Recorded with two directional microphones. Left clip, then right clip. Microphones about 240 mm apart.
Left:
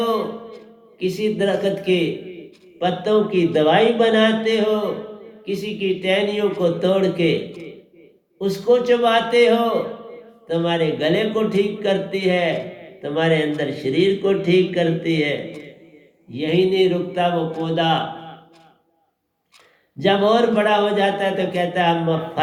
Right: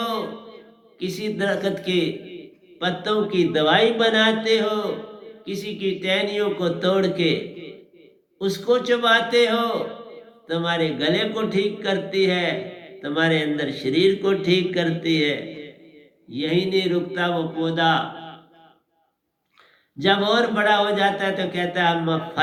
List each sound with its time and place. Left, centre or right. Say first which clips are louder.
0.0 s a man's voice: left 5 dB; right
8.4 s a man's voice: left 4 dB; right
20.0 s a man's voice: left 3 dB; right